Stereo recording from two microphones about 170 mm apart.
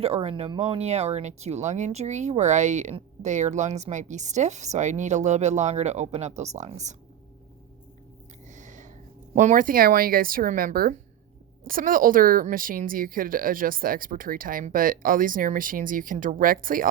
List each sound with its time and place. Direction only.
0.0 s speech: 35° right (ahead or behind)
8.4 s a sound: 45° right (ahead or behind)
9.3 s speech: 45° right (ahead or behind)